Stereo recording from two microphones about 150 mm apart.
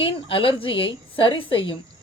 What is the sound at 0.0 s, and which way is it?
A woman's voice, 35° left (ahead or behind).